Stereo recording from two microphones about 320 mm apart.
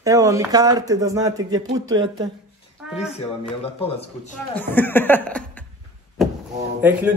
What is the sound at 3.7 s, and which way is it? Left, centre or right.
Speech, centre.